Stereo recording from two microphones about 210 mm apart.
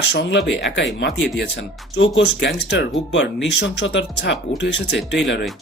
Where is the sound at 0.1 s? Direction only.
55° left (ahead or behind).